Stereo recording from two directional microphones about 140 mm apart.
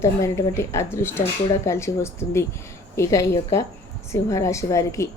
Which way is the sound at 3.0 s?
20° left (ahead or behind).